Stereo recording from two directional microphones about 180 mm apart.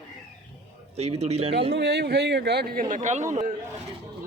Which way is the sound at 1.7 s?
70° right (ahead or behind).